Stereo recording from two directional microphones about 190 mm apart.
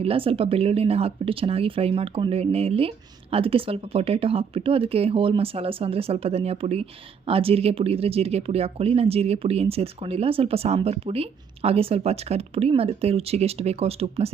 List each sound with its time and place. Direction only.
0.0 s speech: 30° right (ahead or behind)